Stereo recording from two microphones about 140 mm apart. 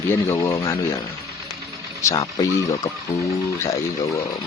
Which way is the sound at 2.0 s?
25° left (ahead or behind).